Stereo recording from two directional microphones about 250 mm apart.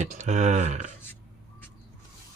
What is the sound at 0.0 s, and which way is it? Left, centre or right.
Speech, right.